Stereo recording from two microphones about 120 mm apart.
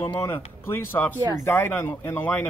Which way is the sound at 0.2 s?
20° left (ahead or behind).